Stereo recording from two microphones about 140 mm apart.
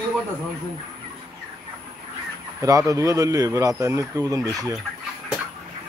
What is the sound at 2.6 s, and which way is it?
Speech, 25° right (ahead or behind).